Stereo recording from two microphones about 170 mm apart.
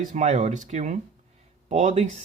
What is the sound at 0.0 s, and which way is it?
Speech, 45° right (ahead or behind).